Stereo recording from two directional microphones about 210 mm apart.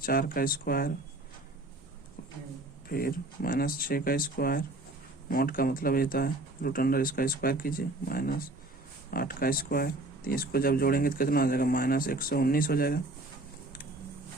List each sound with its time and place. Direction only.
0.0 s speech: 45° left (ahead or behind)
2.9 s speech: 45° left (ahead or behind)